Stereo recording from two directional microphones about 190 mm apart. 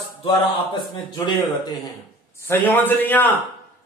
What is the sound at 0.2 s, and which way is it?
A man's voice, 25° left (ahead or behind).